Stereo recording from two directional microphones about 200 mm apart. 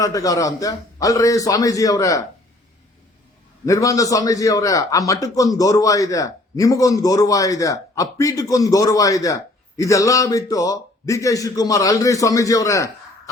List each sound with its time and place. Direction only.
0.0 s a man's voice: 15° left (ahead or behind)
3.7 s a man's voice: 15° left (ahead or behind)